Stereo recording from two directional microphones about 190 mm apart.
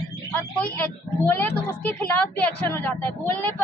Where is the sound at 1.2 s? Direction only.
10° left (ahead or behind).